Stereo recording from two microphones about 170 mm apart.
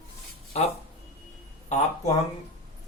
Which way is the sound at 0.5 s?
40° left (ahead or behind).